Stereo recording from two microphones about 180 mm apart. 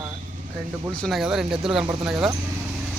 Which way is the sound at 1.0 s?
Centre (ahead or behind).